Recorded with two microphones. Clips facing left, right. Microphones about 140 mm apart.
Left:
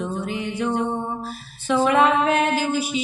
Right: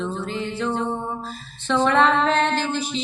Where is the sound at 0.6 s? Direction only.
15° left (ahead or behind).